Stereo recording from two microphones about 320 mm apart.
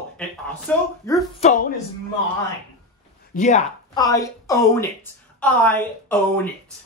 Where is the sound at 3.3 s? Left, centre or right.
Left; by 6.2 s centre.